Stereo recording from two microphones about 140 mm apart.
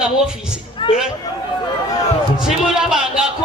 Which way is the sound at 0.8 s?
35° left (ahead or behind).